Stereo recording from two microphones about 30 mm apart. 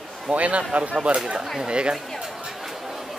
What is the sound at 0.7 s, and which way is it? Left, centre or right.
A man's voice, right.